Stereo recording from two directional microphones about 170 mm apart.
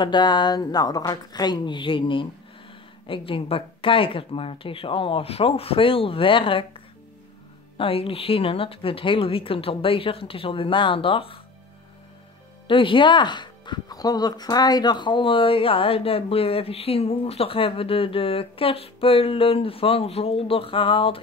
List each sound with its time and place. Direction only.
0.0 s speech: 25° left (ahead or behind)
12.6 s speech: 30° left (ahead or behind)